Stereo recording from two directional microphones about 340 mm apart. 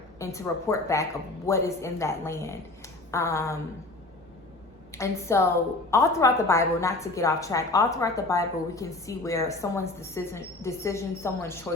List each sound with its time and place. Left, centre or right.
0.2 s a woman's voice: centre
4.9 s a woman's voice: centre